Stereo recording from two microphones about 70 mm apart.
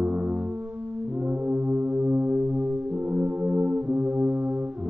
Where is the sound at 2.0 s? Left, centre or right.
Right.